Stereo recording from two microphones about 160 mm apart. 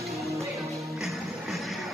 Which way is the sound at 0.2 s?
20° right (ahead or behind).